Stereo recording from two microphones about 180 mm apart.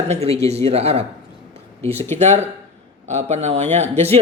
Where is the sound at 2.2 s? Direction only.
40° right (ahead or behind).